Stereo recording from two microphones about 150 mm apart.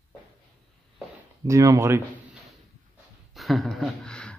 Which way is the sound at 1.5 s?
20° right (ahead or behind).